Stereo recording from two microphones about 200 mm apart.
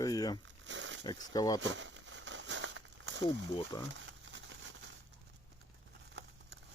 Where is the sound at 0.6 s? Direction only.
65° right (ahead or behind).